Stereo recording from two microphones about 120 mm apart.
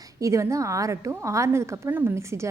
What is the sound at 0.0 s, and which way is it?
A woman's voice, 25° right (ahead or behind).